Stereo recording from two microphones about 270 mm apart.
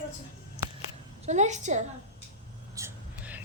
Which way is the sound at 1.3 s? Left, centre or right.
Right.